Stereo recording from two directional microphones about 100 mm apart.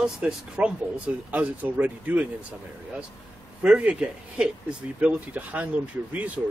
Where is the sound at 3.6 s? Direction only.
15° right (ahead or behind).